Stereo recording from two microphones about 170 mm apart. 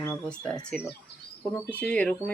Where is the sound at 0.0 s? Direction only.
10° left (ahead or behind).